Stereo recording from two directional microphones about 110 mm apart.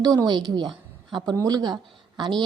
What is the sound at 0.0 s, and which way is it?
A woman's voice, 40° right (ahead or behind).